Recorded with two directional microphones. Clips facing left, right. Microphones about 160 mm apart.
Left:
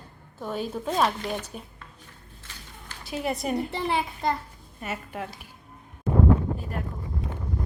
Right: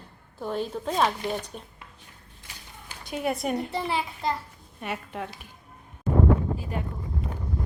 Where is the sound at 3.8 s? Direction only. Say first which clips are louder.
Left 2 dB; 55° left (ahead or behind).